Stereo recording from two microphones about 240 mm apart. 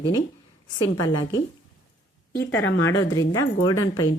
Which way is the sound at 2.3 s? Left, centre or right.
Centre.